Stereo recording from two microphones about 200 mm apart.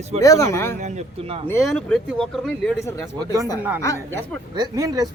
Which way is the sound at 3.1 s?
15° right (ahead or behind).